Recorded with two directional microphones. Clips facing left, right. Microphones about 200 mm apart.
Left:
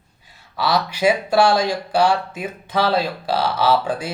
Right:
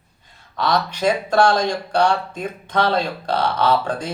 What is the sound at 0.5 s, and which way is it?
Speech, 5° left (ahead or behind).